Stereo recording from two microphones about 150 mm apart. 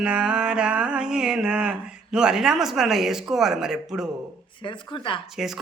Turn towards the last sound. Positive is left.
turn(degrees=0)  # may be behind; listen again after turning